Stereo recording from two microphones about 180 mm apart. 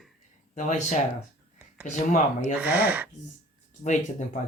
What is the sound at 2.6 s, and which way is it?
Child singing, 10° right (ahead or behind).